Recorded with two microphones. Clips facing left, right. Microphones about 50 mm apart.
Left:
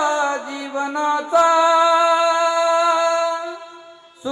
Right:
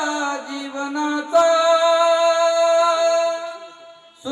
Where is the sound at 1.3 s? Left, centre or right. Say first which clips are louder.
Even; centre.